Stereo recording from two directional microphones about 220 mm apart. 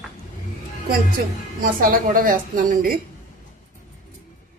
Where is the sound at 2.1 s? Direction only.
40° right (ahead or behind).